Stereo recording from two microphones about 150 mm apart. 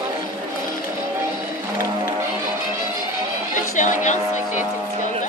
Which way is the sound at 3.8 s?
55° left (ahead or behind).